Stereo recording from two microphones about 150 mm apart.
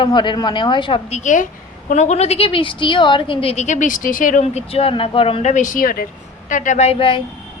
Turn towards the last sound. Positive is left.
turn(degrees=40)  # may be behind; listen again after turning